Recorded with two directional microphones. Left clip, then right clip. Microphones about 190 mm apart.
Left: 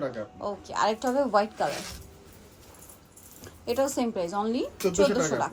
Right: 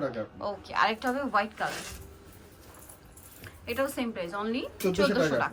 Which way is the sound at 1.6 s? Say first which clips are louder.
Left 3 dB; centre (ahead or behind).